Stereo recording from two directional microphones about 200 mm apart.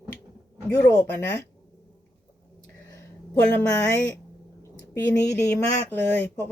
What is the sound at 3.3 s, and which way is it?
Speech, 10° left (ahead or behind).